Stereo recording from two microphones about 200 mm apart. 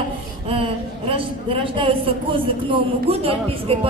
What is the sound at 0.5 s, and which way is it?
A woman's voice, 25° right (ahead or behind).